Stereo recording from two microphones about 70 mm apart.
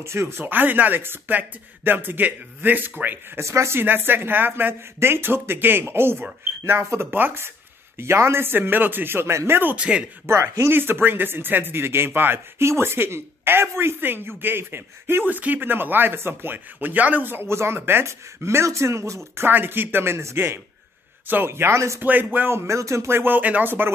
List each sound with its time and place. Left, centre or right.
0.0 s speech: right
3.3 s speech: right
3.8 s speech: right
9.8 s speech: centre
10.2 s speech: right
19.3 s speech: right
22.0 s speech: right